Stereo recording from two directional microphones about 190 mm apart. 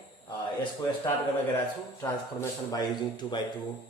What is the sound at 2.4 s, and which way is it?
Speech, 20° left (ahead or behind).